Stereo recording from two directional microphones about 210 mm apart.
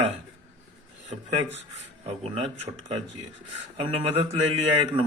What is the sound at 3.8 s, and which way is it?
Speech, 25° right (ahead or behind).